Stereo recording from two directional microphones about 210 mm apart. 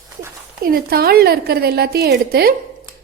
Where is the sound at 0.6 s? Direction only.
45° right (ahead or behind).